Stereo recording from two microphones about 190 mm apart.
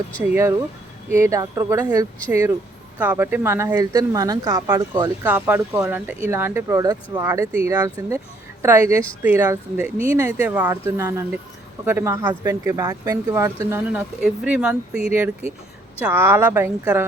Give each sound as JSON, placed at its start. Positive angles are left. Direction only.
{"t": 1.1, "sound": "speech", "side_deg": -15}